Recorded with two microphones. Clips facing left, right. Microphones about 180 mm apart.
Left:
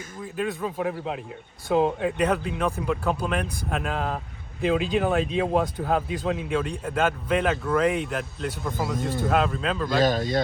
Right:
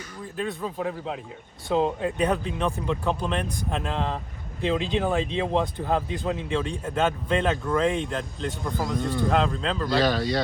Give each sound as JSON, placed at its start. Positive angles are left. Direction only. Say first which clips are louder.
{"t": 0.3, "sound": "a man's voice", "louder": "left 2 dB", "side_deg": 5}
{"t": 9.8, "sound": "speech", "louder": "left 1 dB", "side_deg": 45}